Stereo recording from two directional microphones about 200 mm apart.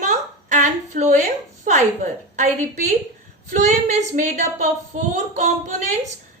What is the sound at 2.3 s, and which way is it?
A woman's voice, 35° right (ahead or behind).